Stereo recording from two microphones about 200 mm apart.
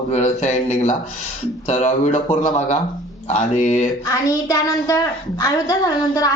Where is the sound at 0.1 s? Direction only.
35° left (ahead or behind).